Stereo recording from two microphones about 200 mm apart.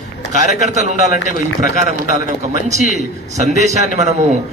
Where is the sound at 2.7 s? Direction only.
35° right (ahead or behind).